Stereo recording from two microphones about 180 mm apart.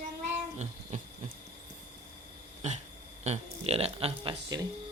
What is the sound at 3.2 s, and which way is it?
Speech, 35° right (ahead or behind).